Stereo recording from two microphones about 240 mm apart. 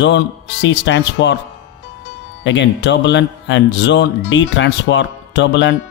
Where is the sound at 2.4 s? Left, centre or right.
Left.